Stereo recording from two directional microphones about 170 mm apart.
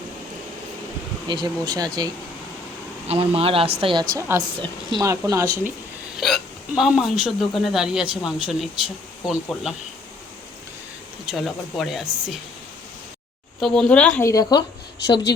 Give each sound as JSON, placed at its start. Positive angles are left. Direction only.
{"t": 1.3, "sound": "speech", "side_deg": -25}
{"t": 3.1, "sound": "speech", "side_deg": -35}
{"t": 4.2, "sound": "speech", "side_deg": -15}
{"t": 6.1, "sound": "speech", "side_deg": 0}
{"t": 11.3, "sound": "speech", "side_deg": 0}
{"t": 13.6, "sound": "speech", "side_deg": 5}
{"t": 14.3, "sound": "speech", "side_deg": 20}